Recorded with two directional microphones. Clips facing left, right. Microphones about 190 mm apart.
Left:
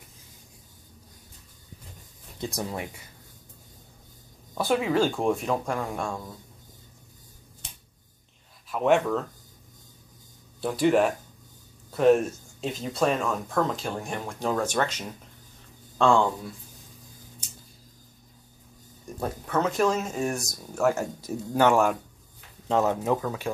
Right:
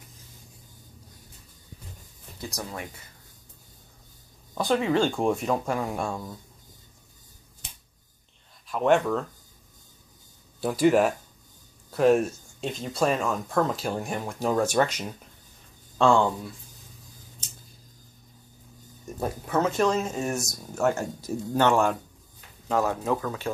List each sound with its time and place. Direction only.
2.4 s speech: 20° left (ahead or behind)
4.6 s speech: 5° left (ahead or behind)
8.6 s speech: centre (ahead or behind)
10.6 s speech: 5° right (ahead or behind)
19.1 s speech: 10° right (ahead or behind); by 21.9 s 10° left (ahead or behind)
22.7 s speech: 20° left (ahead or behind)